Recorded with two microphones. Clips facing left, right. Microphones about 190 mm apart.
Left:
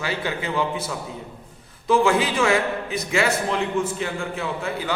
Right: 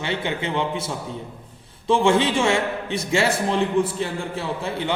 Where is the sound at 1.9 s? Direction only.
30° right (ahead or behind).